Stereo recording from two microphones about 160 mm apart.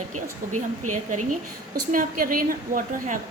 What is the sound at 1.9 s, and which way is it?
A woman's voice, 60° right (ahead or behind).